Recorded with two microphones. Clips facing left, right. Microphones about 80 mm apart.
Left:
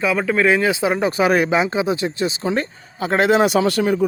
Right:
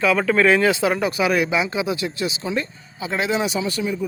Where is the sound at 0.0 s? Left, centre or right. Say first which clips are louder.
Even; centre.